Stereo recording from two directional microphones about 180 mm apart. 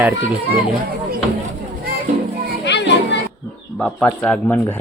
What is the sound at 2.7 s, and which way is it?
Children playing, 75° left (ahead or behind).